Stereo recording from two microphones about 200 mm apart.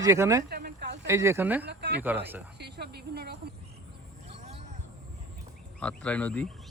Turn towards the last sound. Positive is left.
turn(degrees=5)  # may be behind; listen again after turning